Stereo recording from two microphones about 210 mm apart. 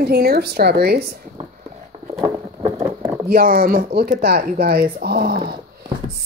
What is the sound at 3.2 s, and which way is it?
Speech, 45° right (ahead or behind).